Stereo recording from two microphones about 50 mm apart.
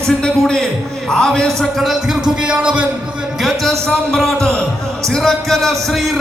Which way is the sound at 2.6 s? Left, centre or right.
Right.